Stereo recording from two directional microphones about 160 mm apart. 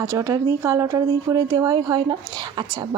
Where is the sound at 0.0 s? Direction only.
20° right (ahead or behind).